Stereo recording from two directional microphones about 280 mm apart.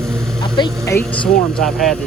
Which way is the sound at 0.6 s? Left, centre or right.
Centre.